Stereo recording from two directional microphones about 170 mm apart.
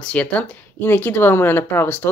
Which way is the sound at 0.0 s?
10° left (ahead or behind).